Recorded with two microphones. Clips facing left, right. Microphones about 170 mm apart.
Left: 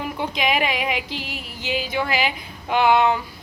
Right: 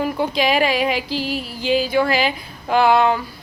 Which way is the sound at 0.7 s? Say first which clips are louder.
Right 5 dB; 30° right (ahead or behind).